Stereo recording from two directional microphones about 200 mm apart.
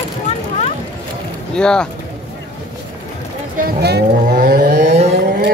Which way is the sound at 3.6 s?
50° right (ahead or behind).